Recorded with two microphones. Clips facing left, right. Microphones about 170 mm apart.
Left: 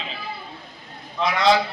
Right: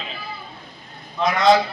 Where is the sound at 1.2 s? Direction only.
45° right (ahead or behind).